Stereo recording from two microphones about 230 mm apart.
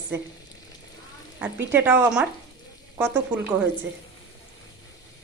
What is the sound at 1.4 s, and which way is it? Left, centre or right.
Speech, centre.